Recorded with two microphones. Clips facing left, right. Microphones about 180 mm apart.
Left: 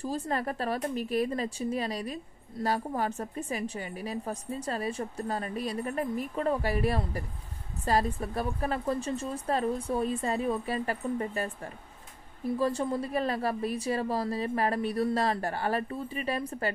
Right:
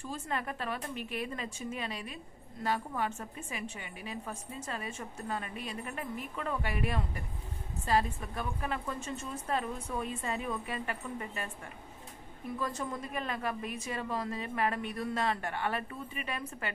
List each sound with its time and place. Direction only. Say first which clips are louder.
0.0 s a woman's voice: left 6 dB; 35° left (ahead or behind)